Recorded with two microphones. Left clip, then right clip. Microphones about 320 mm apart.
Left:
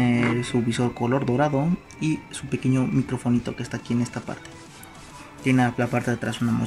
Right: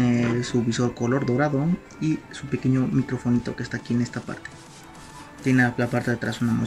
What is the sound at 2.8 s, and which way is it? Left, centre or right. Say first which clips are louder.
Speech: even; centre.